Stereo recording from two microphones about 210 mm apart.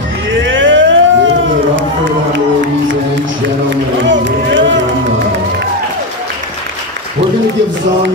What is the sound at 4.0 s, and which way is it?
Run, 60° right (ahead or behind).